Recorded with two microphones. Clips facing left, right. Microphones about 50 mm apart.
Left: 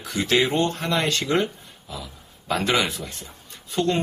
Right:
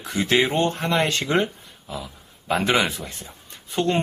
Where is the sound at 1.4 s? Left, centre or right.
Right.